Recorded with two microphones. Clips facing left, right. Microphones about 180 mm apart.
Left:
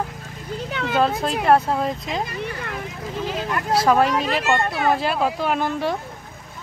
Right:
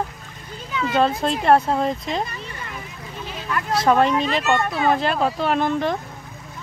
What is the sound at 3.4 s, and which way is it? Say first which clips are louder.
Speech: even; 35° left (ahead or behind).